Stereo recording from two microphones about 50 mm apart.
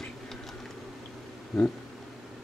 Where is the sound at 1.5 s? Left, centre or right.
Centre.